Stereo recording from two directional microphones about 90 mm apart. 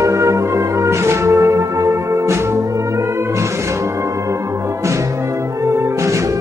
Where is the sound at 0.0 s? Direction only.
35° right (ahead or behind).